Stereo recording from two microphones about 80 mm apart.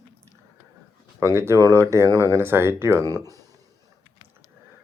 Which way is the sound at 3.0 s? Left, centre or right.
Right.